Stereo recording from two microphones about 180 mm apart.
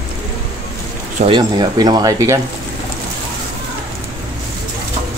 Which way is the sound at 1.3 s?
25° right (ahead or behind).